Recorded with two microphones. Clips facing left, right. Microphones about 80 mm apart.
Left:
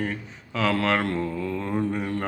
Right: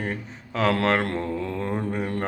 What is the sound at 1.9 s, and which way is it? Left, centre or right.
Mantra, right.